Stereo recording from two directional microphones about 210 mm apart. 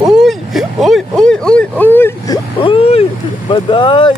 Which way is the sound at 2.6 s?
25° left (ahead or behind).